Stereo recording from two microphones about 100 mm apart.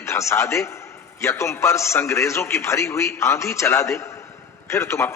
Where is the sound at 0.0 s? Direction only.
30° left (ahead or behind).